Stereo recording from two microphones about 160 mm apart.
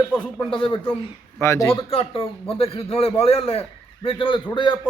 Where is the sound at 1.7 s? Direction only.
35° left (ahead or behind).